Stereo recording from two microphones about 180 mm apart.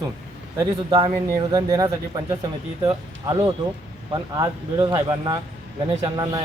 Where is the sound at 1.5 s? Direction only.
20° right (ahead or behind).